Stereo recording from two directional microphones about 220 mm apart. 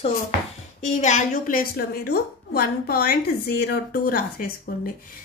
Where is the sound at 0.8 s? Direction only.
35° left (ahead or behind).